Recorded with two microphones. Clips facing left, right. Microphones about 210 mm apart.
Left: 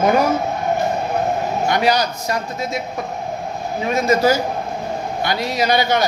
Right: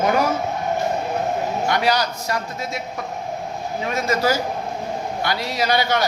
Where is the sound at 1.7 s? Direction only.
20° left (ahead or behind).